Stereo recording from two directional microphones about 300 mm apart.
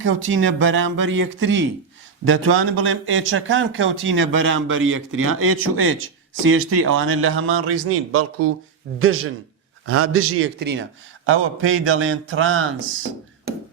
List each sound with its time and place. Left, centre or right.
0.0 s speech: right